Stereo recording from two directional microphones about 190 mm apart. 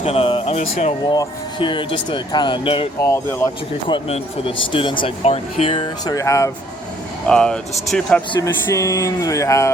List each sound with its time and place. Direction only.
0.0 s speech: 30° left (ahead or behind)
1.0 s speech: 20° left (ahead or behind)
3.0 s speech: 15° left (ahead or behind)
3.8 s speech: 25° left (ahead or behind)
7.3 s speech: 5° left (ahead or behind)
8.3 s speech: 15° left (ahead or behind)